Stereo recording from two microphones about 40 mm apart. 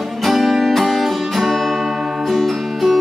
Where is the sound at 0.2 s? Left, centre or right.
Centre.